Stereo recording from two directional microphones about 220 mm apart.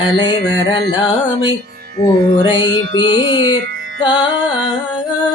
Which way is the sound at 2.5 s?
20° left (ahead or behind).